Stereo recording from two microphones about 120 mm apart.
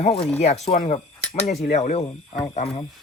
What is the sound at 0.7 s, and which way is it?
Speech, 90° left.